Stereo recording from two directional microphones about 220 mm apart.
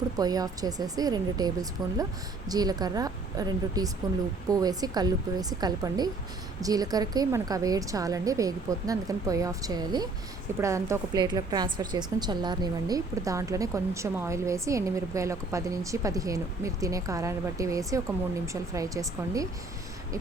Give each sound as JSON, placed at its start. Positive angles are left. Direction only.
{"t": 0.2, "sound": "a woman's voice", "side_deg": -15}